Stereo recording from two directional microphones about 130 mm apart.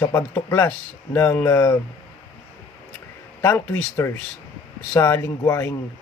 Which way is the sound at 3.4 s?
15° left (ahead or behind).